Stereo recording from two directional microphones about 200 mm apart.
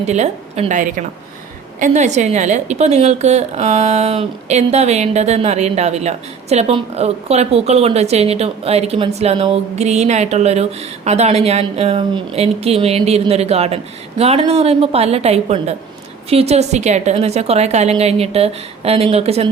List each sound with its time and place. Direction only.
0.1 s a woman's voice: 35° right (ahead or behind)